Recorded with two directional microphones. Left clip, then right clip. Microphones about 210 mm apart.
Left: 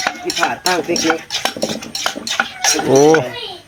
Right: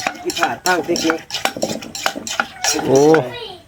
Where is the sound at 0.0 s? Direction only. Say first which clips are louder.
Left 2 dB; 10° right (ahead or behind).